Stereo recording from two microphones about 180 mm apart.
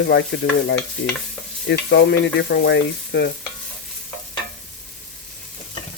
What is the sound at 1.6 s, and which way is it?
Stir, 70° left (ahead or behind).